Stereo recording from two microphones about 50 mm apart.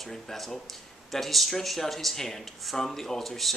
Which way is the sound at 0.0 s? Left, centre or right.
Centre.